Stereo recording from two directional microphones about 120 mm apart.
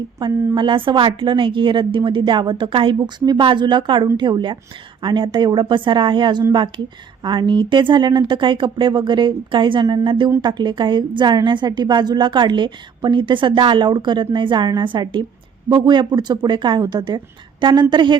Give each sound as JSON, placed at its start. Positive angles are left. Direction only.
{"t": 0.2, "sound": "a woman's voice", "side_deg": -40}